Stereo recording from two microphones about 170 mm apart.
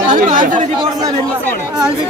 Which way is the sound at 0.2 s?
50° right (ahead or behind).